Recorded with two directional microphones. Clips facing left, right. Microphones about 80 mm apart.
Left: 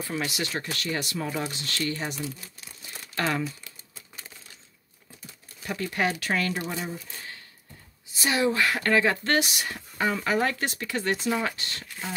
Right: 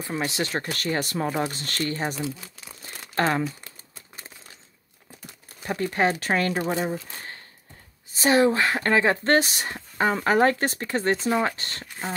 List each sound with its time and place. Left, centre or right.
0.0 s speech: right
2.8 s crumpling: right
5.6 s speech: right